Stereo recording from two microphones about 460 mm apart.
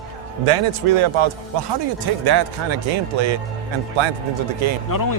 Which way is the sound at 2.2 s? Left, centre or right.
Right.